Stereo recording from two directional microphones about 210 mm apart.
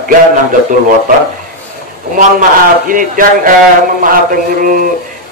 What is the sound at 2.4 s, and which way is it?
A man's voice, 40° right (ahead or behind).